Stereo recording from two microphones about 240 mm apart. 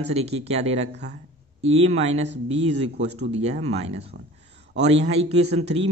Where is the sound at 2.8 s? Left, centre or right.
Right.